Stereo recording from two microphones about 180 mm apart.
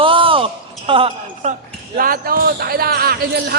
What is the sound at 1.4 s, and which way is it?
Speech, 45° right (ahead or behind).